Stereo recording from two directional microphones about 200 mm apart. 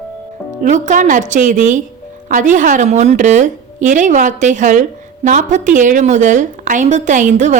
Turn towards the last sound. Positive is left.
turn(degrees=-35)  # may be behind; listen again after turning